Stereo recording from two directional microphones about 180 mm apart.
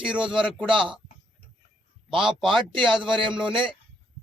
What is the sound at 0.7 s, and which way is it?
Speech, 30° right (ahead or behind).